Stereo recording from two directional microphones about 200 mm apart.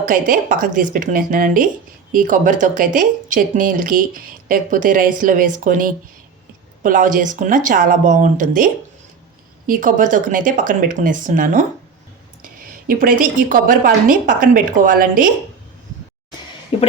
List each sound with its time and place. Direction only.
0.0 s a woman's voice: 45° right (ahead or behind)
12.9 s a woman's voice: 45° right (ahead or behind)
16.7 s speech: 30° left (ahead or behind)